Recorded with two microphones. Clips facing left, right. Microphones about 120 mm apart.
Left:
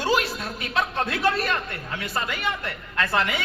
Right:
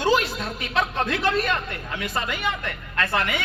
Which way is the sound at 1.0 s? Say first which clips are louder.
Right 1 dB; 30° left (ahead or behind).